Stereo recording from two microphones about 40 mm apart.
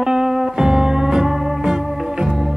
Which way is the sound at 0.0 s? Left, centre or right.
Centre.